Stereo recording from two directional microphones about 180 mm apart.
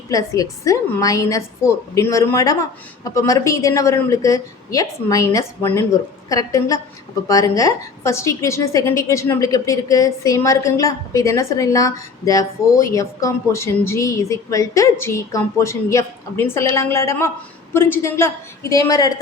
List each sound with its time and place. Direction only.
0.1 s a woman's voice: 20° left (ahead or behind)